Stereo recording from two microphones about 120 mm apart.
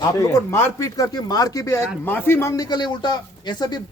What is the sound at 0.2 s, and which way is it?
Speech, 25° left (ahead or behind).